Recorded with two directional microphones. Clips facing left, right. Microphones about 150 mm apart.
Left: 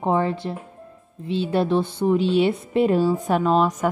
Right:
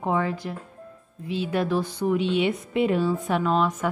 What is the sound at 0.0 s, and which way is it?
Speech, 30° left (ahead or behind).